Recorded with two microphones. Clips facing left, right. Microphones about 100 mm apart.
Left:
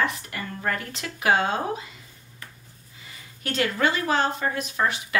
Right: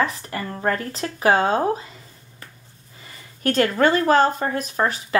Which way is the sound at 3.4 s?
45° right (ahead or behind).